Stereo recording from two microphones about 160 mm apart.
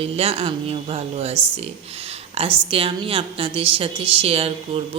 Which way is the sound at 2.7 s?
35° right (ahead or behind).